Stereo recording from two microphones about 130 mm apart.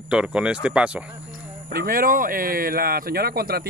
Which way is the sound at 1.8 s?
90° right.